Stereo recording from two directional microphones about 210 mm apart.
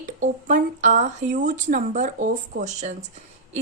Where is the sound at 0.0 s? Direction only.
35° right (ahead or behind).